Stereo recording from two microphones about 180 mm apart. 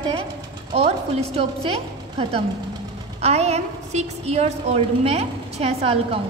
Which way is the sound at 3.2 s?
35° right (ahead or behind).